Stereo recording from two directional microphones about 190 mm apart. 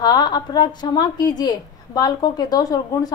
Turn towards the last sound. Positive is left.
turn(degrees=20)  # may be behind; listen again after turning